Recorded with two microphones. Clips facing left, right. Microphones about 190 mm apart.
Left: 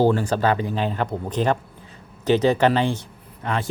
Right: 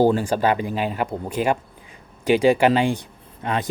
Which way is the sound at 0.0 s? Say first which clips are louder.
Right 1 dB; 15° right (ahead or behind).